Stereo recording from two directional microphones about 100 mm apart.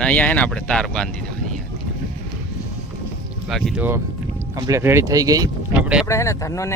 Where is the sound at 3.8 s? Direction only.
20° right (ahead or behind).